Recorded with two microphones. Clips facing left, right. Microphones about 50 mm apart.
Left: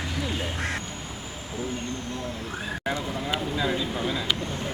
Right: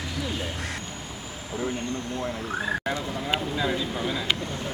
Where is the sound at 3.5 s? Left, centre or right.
Centre.